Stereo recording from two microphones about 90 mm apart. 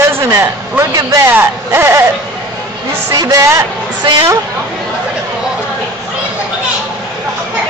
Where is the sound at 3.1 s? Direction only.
35° right (ahead or behind).